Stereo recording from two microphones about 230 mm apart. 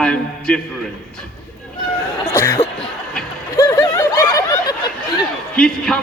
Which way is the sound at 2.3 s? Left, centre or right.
Centre.